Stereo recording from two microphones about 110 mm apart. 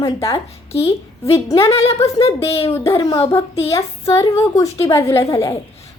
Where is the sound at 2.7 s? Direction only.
25° left (ahead or behind).